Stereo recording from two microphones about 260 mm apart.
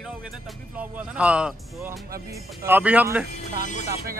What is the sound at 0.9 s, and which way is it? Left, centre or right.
Speech, centre.